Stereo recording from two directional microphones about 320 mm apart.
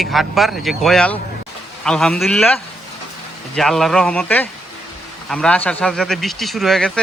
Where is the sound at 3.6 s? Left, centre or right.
Centre.